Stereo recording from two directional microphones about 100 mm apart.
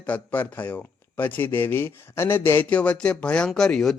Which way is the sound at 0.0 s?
20° left (ahead or behind).